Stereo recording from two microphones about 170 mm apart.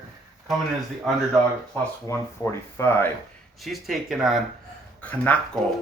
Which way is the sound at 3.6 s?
Centre (ahead or behind).